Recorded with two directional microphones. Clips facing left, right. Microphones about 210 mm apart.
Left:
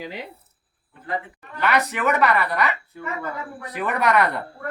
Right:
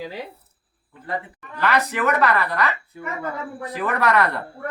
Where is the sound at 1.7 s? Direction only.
10° left (ahead or behind).